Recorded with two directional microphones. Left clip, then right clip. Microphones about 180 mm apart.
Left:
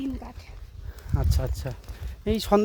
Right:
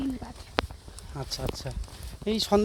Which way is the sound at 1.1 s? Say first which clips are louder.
Even; 50° left (ahead or behind).